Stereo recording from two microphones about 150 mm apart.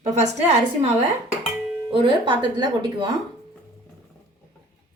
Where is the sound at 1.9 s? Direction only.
35° right (ahead or behind).